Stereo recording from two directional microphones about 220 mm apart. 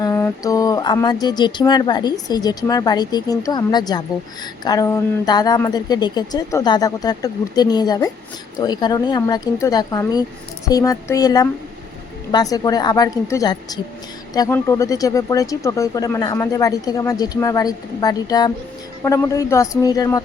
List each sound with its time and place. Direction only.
0.0 s speech: 15° left (ahead or behind)